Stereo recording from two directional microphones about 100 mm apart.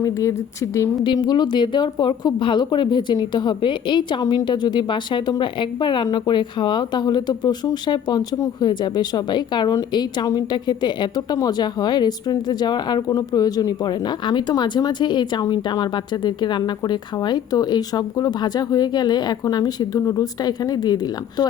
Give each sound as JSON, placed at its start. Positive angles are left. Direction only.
{"t": 0.0, "sound": "speech", "side_deg": 30}
{"t": 1.0, "sound": "speech", "side_deg": 45}